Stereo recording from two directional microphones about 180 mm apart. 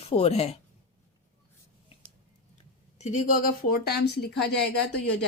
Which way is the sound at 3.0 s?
45° left (ahead or behind).